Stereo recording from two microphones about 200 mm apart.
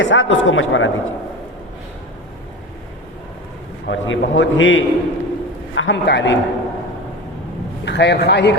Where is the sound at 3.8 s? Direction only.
60° left (ahead or behind).